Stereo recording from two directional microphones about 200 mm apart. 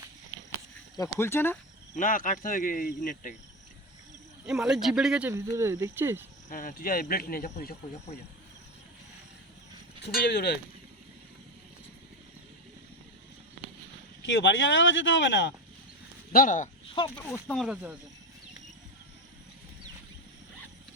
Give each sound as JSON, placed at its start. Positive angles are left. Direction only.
{"t": 0.5, "sound": "a sound", "side_deg": 15}
{"t": 2.0, "sound": "speech", "side_deg": 40}
{"t": 4.4, "sound": "speech", "side_deg": -5}
{"t": 6.5, "sound": "speech", "side_deg": 45}
{"t": 10.0, "sound": "speech", "side_deg": 50}
{"t": 14.3, "sound": "speech", "side_deg": 65}
{"t": 16.3, "sound": "speech", "side_deg": 40}
{"t": 17.2, "sound": "speech", "side_deg": 10}